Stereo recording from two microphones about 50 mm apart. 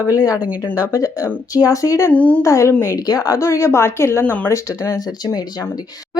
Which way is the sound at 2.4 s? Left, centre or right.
Left.